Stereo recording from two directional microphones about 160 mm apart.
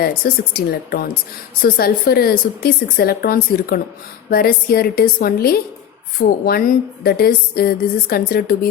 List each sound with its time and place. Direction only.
0.0 s a woman's voice: 70° left (ahead or behind)